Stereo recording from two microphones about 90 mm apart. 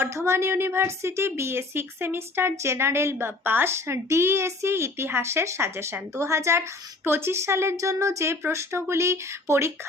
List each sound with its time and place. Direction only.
0.0 s a woman's voice: 30° right (ahead or behind)